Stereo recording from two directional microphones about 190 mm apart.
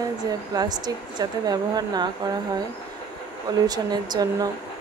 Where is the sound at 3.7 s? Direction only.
20° right (ahead or behind).